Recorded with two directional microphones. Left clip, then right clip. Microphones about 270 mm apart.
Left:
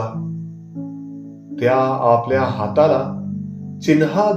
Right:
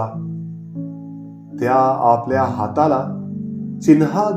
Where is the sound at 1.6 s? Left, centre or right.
Right.